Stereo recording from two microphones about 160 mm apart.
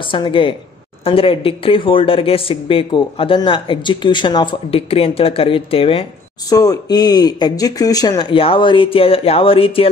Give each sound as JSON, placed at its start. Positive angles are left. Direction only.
{"t": 0.0, "sound": "speech", "side_deg": 30}
{"t": 6.5, "sound": "speech", "side_deg": 25}